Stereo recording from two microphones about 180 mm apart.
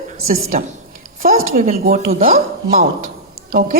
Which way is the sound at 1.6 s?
40° right (ahead or behind).